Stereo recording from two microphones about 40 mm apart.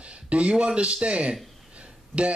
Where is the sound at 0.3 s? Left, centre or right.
Right.